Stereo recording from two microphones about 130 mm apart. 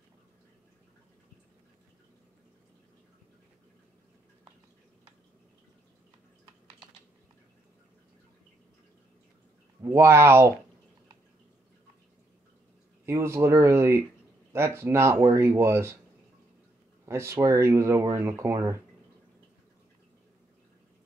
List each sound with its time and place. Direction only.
9.8 s speech: 20° right (ahead or behind)
13.0 s speech: 20° right (ahead or behind)
17.0 s speech: 20° right (ahead or behind)